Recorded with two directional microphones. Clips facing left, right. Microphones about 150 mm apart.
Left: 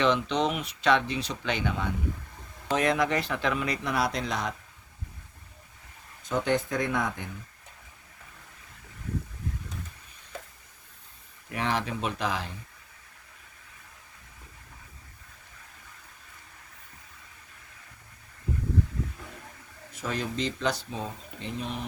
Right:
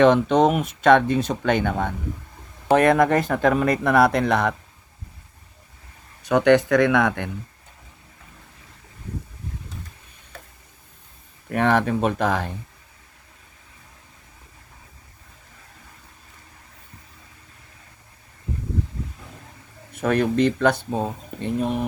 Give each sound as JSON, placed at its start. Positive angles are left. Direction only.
{"t": 0.0, "sound": "speech", "side_deg": -50}
{"t": 6.2, "sound": "speech", "side_deg": -70}
{"t": 11.4, "sound": "speech", "side_deg": -55}
{"t": 19.9, "sound": "speech", "side_deg": -60}